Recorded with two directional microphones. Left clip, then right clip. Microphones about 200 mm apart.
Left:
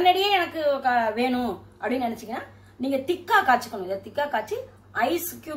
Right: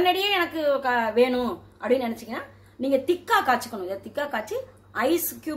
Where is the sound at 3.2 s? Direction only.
50° right (ahead or behind).